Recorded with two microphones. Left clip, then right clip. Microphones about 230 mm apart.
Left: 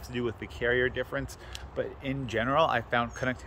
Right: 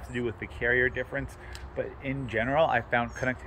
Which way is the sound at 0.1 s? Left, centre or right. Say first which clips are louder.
Right 1 dB; centre.